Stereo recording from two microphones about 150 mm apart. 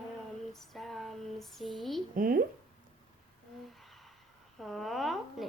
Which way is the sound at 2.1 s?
65° right (ahead or behind).